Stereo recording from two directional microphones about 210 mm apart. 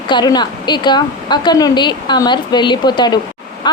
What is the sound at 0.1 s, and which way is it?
Speech, 20° left (ahead or behind).